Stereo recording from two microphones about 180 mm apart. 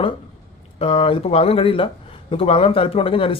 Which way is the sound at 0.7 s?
30° left (ahead or behind).